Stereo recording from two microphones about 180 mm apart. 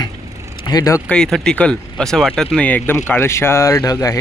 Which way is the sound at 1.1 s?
5° left (ahead or behind).